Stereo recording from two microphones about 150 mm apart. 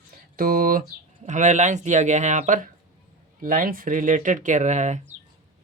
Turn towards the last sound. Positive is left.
turn(degrees=-50)  # may be behind; listen again after turning